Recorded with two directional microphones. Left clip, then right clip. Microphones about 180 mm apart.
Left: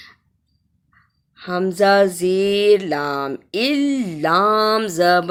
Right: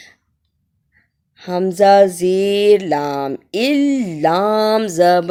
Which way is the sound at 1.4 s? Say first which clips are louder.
Right 3 dB; 45° right (ahead or behind).